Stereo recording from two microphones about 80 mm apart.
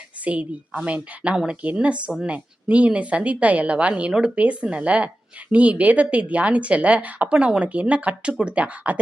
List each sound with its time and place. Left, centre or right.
0.3 s speech: centre